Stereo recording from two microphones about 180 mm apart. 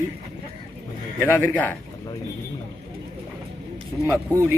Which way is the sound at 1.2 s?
10° left (ahead or behind).